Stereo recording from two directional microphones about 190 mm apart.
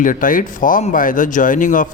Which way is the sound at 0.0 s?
45° left (ahead or behind).